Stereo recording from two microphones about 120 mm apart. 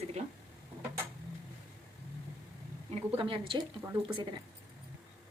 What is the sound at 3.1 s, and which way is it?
Speech, 45° right (ahead or behind).